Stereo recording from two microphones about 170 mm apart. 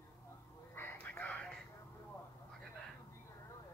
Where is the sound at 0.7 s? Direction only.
10° left (ahead or behind).